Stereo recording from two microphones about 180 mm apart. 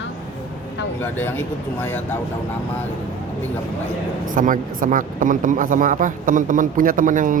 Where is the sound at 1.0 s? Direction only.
10° left (ahead or behind).